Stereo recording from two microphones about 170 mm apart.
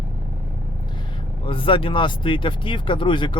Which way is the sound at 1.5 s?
30° left (ahead or behind).